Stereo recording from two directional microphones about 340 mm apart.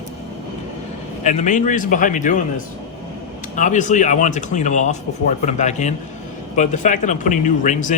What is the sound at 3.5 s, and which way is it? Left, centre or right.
Speech, left.